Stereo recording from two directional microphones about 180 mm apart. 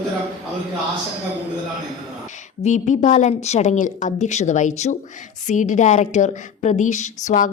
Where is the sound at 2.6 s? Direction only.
40° left (ahead or behind).